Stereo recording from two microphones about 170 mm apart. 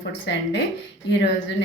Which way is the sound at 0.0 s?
90° left.